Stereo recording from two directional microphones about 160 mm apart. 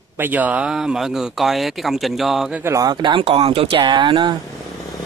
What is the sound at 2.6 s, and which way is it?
Speech, 20° right (ahead or behind).